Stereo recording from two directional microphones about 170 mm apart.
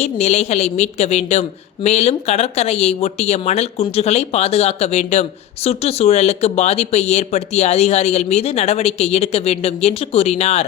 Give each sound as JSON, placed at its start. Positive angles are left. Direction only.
{"t": 0.0, "sound": "a woman's voice", "side_deg": 40}